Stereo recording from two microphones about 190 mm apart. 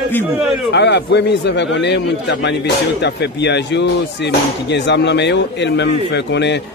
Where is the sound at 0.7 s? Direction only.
65° left (ahead or behind).